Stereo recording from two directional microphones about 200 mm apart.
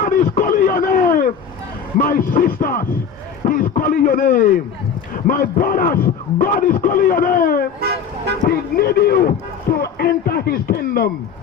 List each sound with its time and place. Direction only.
0.0 s a sound: 40° left (ahead or behind)
2.0 s a man's voice: 45° left (ahead or behind)
7.8 s vehicle: 50° right (ahead or behind)
8.4 s a man's voice: 50° left (ahead or behind)